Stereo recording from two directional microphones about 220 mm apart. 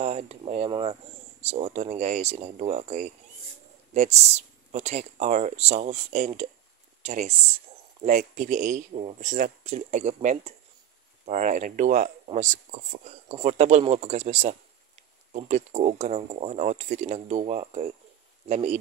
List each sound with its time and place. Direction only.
0.0 s speech: 30° right (ahead or behind)